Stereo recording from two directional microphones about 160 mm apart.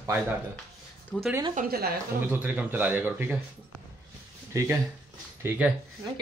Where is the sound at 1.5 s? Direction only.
65° right (ahead or behind).